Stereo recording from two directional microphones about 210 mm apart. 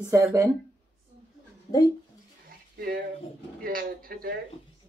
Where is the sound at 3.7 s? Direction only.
45° right (ahead or behind).